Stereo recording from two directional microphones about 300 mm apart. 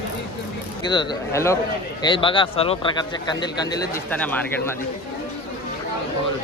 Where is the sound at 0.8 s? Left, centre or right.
Centre.